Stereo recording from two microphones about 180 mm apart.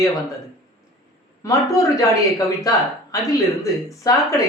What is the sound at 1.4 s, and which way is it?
Speech, 20° left (ahead or behind).